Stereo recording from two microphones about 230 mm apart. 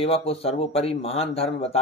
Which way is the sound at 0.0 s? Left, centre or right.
Left.